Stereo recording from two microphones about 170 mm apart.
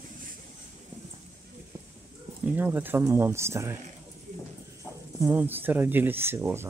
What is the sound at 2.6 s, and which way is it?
Speech, 10° right (ahead or behind).